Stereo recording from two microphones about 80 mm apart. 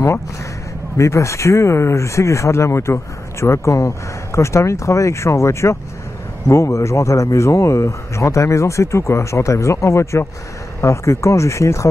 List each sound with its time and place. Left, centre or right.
0.9 s speech: left